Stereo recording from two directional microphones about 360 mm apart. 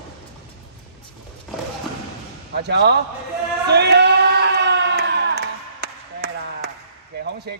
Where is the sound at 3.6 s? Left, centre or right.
Right.